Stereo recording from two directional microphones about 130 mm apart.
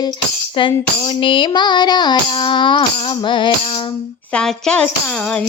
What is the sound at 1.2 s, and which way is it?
Music, 40° left (ahead or behind).